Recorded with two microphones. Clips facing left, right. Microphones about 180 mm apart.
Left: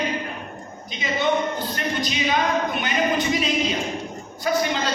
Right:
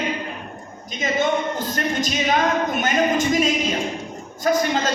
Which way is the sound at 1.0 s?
45° right (ahead or behind).